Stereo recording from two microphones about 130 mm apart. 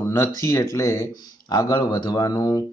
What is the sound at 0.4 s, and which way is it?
Speech, 20° left (ahead or behind).